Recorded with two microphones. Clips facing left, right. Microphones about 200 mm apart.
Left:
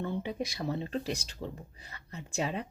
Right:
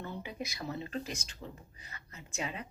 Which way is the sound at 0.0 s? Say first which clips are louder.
Left 7 dB; 30° left (ahead or behind).